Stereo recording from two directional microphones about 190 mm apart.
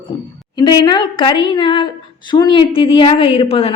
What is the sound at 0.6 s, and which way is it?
A woman's voice, 25° left (ahead or behind).